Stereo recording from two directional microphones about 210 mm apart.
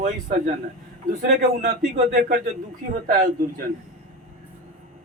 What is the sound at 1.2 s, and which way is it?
A man's voice, 50° right (ahead or behind).